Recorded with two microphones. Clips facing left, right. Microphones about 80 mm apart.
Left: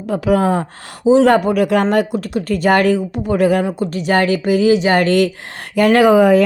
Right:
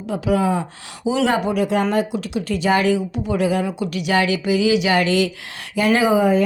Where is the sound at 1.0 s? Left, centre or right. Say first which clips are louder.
Left 9 dB; left.